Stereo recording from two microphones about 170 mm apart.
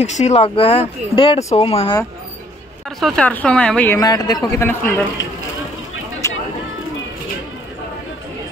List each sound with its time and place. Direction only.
0.0 s speech: 40° left (ahead or behind)
3.0 s speech: 5° left (ahead or behind)
4.0 s a man's voice: 25° left (ahead or behind)
6.2 s a sound: 15° left (ahead or behind)